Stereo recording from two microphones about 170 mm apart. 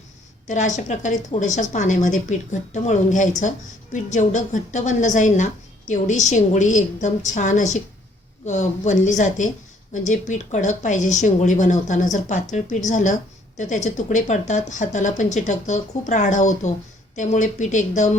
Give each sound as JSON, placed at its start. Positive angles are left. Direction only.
{"t": 0.4, "sound": "speech", "side_deg": 45}